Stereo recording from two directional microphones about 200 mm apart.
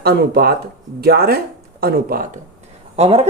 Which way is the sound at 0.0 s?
50° right (ahead or behind).